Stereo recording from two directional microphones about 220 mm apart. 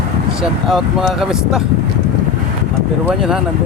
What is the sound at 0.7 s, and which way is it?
Speech, centre (ahead or behind).